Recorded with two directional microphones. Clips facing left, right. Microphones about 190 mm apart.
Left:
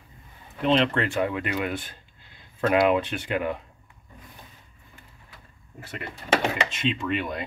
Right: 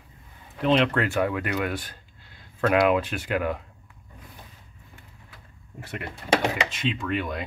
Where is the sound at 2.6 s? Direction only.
Centre (ahead or behind).